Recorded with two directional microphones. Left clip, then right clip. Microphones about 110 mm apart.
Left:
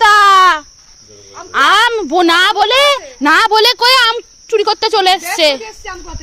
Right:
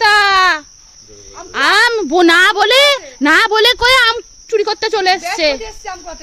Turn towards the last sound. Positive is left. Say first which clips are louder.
# even
turn(degrees=-30)  # may be behind; listen again after turning